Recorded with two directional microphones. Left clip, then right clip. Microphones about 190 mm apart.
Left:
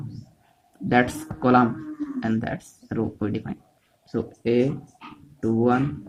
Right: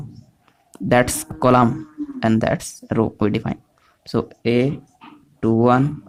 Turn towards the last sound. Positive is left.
turn(degrees=-55)  # may be behind; listen again after turning